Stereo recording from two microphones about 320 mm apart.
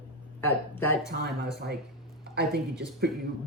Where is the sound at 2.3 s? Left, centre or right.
Right.